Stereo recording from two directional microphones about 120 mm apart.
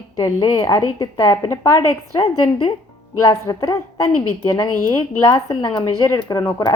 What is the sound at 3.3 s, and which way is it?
A woman's voice, 30° left (ahead or behind).